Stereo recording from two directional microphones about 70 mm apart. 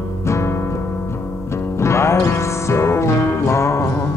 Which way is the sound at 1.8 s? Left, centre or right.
Left.